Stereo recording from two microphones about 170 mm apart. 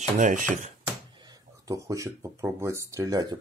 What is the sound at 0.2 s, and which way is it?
Speech, 45° right (ahead or behind).